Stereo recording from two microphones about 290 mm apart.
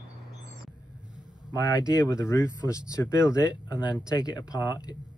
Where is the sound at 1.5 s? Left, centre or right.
Centre.